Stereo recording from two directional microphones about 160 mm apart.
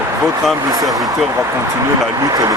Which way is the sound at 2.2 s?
20° right (ahead or behind).